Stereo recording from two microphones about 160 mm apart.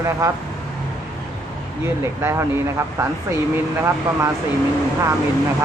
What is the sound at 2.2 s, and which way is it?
Speech, 15° right (ahead or behind).